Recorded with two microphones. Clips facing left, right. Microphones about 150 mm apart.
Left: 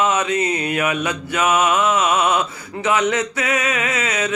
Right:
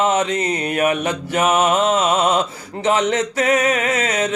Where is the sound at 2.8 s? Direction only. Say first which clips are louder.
Right 1 dB; 35° right (ahead or behind).